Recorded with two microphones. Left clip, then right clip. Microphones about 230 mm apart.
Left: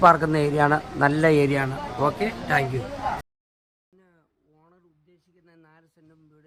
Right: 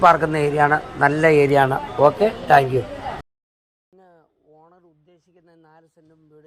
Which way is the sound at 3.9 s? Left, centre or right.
Centre.